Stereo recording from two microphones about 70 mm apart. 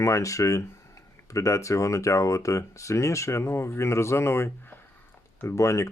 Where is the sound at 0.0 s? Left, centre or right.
Left.